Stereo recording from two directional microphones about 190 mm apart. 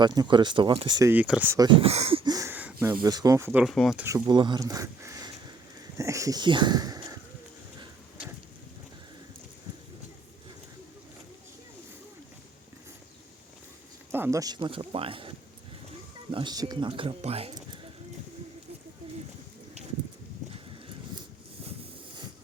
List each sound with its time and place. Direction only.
0.0 s speech: 20° right (ahead or behind)
1.1 s speech: 10° right (ahead or behind)
1.6 s speech: 30° right (ahead or behind); by 2.7 s 10° right (ahead or behind)
2.8 s speech: 20° right (ahead or behind); by 4.0 s centre (ahead or behind)
4.0 s speech: 20° right (ahead or behind)
14.1 s speech: 15° right (ahead or behind); by 15.3 s 30° right (ahead or behind)
16.3 s speech: 25° right (ahead or behind)